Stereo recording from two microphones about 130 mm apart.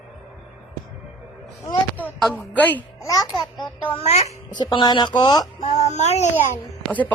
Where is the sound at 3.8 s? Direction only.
50° left (ahead or behind).